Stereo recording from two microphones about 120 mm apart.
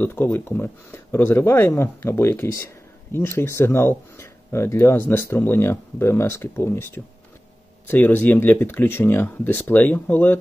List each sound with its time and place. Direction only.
0.0 s speech: 20° left (ahead or behind)